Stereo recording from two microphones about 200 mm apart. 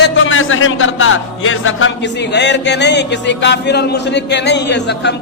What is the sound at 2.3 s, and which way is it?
A man's voice, 60° left (ahead or behind).